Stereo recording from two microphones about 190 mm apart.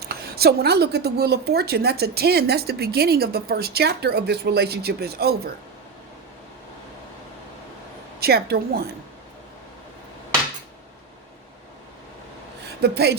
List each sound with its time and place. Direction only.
0.0 s a woman's voice: 55° right (ahead or behind)
8.2 s a woman's voice: 55° right (ahead or behind)
12.6 s speech: 60° right (ahead or behind)